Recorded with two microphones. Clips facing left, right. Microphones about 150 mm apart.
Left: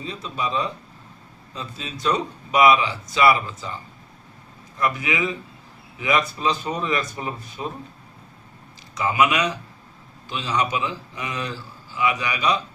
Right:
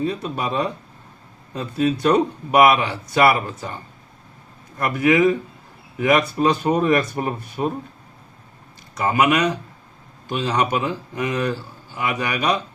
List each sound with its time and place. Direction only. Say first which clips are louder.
0.0 s a man's voice: right 5 dB; 55° right (ahead or behind)
4.8 s a man's voice: right 7 dB; 55° right (ahead or behind)
9.0 s a man's voice: right 3 dB; 55° right (ahead or behind)